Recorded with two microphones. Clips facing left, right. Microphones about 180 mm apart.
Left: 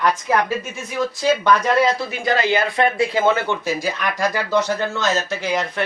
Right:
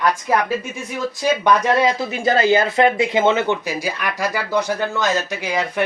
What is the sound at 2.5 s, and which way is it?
Speech, 25° right (ahead or behind).